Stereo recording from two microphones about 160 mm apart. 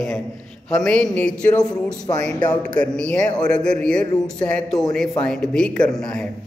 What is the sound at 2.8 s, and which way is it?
A man's voice, 5° left (ahead or behind).